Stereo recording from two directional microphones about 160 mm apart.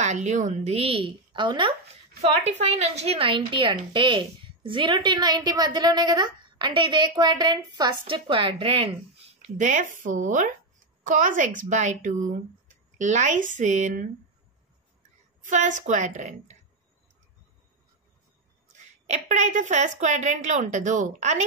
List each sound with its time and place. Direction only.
0.0 s a woman's voice: 45° right (ahead or behind); by 1.8 s 30° right (ahead or behind)
2.2 s a woman's voice: 40° right (ahead or behind)
9.6 s speech: 55° right (ahead or behind)
15.4 s speech: 50° right (ahead or behind)
19.0 s speech: 45° right (ahead or behind)